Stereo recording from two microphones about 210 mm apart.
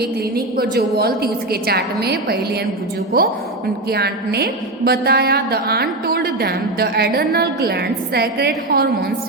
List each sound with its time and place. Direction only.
0.0 s a woman's voice: 45° right (ahead or behind)